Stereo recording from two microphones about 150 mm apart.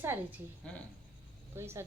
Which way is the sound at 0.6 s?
5° left (ahead or behind).